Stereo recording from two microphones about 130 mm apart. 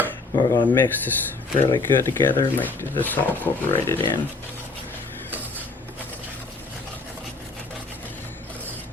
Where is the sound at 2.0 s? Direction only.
15° left (ahead or behind).